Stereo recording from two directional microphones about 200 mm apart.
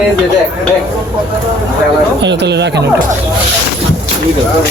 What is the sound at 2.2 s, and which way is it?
Speech, 60° right (ahead or behind).